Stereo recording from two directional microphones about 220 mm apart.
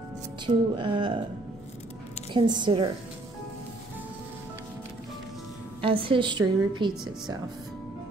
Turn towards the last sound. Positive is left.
turn(degrees=-20)  # may be behind; listen again after turning